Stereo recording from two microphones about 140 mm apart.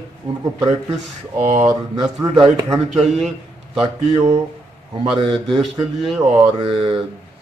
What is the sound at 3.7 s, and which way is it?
A man's voice, 45° right (ahead or behind).